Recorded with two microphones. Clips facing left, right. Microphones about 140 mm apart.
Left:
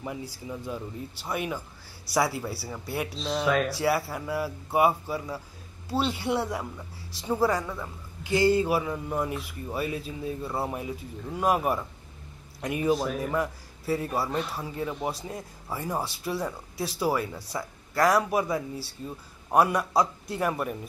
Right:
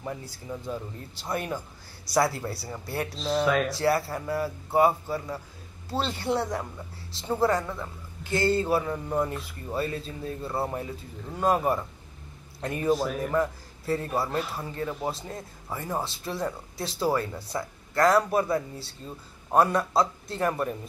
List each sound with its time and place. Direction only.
0.0 s a man's voice: 10° left (ahead or behind)
12.9 s a man's voice: centre (ahead or behind)